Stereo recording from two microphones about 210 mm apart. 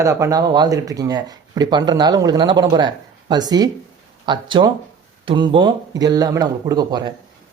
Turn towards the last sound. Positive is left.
turn(degrees=-20)  # may be behind; listen again after turning